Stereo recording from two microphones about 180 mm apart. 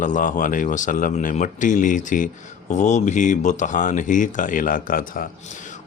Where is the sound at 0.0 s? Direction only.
45° left (ahead or behind).